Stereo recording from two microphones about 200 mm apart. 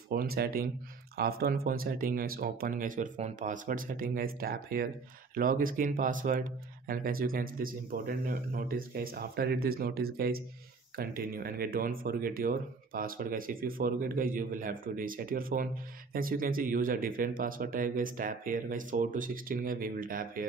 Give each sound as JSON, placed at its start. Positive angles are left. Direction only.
{"t": 0.1, "sound": "speech", "side_deg": -50}